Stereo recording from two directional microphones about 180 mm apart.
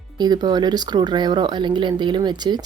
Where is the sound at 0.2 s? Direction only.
25° right (ahead or behind).